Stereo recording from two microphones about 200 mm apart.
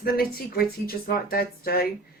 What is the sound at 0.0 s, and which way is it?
Speech, 50° left (ahead or behind).